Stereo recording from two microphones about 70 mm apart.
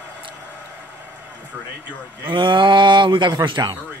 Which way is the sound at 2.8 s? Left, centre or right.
Right.